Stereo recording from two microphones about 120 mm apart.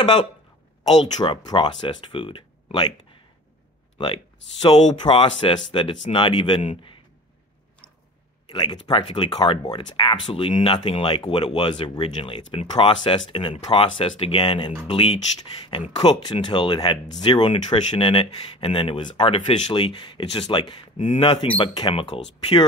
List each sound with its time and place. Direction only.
0.0 s speech: 45° left (ahead or behind)
4.0 s speech: 40° left (ahead or behind)
8.5 s speech: 35° left (ahead or behind)
15.9 s speech: 40° left (ahead or behind)